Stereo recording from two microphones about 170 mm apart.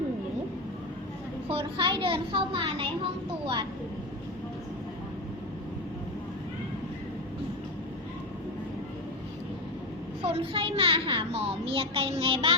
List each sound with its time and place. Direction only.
1.5 s a child's voice: 30° right (ahead or behind)
10.2 s a child's voice: 35° right (ahead or behind)